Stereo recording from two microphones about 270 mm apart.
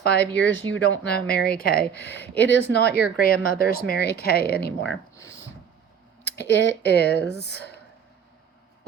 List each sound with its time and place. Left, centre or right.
0.0 s speech: left
6.2 s speech: left